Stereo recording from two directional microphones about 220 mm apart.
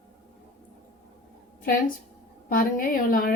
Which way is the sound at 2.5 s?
40° left (ahead or behind).